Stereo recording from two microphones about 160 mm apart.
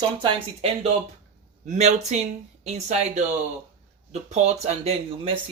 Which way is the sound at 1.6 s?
45° right (ahead or behind).